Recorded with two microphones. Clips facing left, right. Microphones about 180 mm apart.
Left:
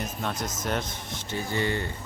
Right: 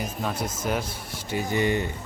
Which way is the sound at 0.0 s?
5° right (ahead or behind).